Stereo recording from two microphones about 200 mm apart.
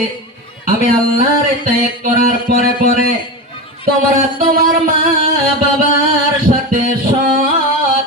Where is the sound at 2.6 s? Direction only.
45° right (ahead or behind).